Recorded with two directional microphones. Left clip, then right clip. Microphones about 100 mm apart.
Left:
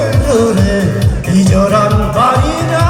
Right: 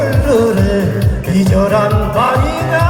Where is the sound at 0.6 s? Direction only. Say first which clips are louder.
Left 1 dB; 40° left (ahead or behind).